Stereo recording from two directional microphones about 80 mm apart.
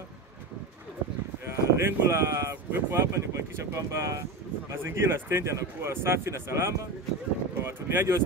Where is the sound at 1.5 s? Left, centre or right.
Right.